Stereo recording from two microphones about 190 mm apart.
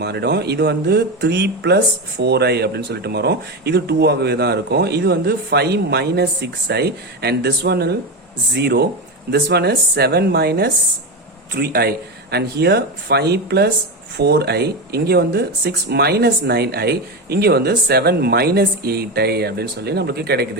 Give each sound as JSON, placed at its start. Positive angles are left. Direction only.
{"t": 0.0, "sound": "speech", "side_deg": -60}